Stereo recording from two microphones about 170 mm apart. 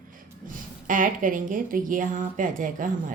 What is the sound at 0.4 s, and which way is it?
Speech, 50° right (ahead or behind).